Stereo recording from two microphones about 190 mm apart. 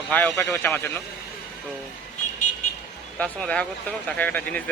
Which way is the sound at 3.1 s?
5° left (ahead or behind).